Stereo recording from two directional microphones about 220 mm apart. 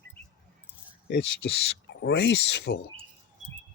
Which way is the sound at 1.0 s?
55° left (ahead or behind).